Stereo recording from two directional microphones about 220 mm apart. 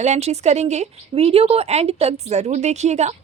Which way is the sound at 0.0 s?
30° right (ahead or behind).